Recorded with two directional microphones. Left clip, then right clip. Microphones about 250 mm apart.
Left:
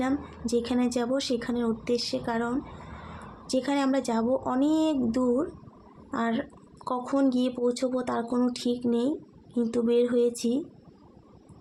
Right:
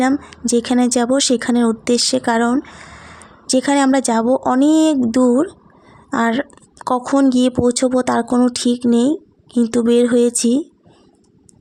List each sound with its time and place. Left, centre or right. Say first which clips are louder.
0.0 s speech: right 12 dB; right